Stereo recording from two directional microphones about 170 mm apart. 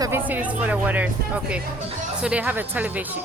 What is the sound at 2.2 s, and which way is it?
Speech, 10° right (ahead or behind).